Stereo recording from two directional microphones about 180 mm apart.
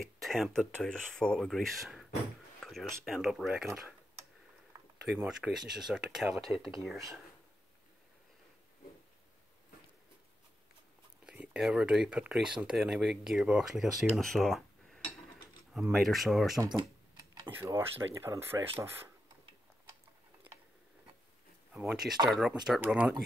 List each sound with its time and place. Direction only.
0.0 s speech: centre (ahead or behind)
5.1 s speech: 5° right (ahead or behind)
11.2 s speech: 5° right (ahead or behind)
16.5 s speech: 25° right (ahead or behind)
21.7 s speech: centre (ahead or behind)